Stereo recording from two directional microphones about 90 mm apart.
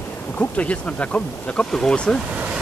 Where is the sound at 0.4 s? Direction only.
15° left (ahead or behind).